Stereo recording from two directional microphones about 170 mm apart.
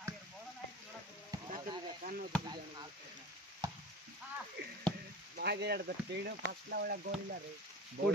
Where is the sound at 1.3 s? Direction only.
20° right (ahead or behind).